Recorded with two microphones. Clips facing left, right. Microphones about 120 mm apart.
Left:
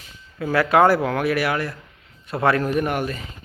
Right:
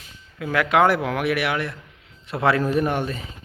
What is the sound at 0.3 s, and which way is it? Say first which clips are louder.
Speech: left 2 dB; 5° left (ahead or behind).